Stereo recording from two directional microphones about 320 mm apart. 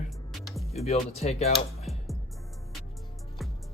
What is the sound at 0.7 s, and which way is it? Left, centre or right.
Speech, centre.